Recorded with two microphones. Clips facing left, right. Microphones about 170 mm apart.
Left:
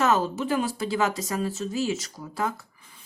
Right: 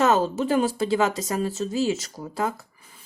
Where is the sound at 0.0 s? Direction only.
30° right (ahead or behind).